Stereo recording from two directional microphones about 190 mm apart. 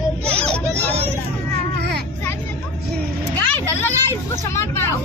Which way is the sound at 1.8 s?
60° right (ahead or behind).